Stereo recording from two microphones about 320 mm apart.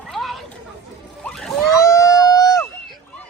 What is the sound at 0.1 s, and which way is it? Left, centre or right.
Chatter, centre.